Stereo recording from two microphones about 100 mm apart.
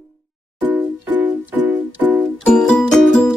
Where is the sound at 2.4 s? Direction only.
10° left (ahead or behind).